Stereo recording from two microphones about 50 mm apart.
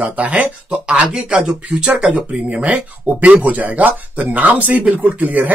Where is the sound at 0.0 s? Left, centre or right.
Right.